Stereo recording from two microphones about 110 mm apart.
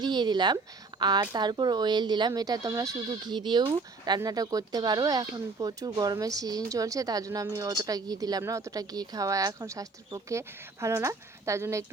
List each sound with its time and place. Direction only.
0.0 s speech: 40° right (ahead or behind)